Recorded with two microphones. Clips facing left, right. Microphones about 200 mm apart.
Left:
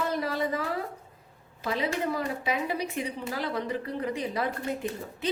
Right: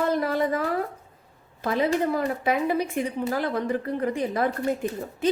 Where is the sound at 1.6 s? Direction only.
50° right (ahead or behind).